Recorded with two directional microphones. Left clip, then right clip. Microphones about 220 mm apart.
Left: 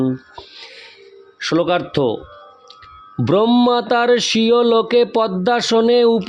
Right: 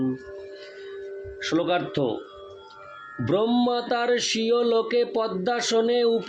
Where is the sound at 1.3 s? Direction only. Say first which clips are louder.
Left 7 dB; 50° left (ahead or behind).